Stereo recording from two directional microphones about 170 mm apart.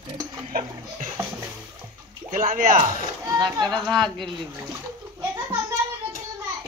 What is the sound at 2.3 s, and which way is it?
Speech, 50° right (ahead or behind).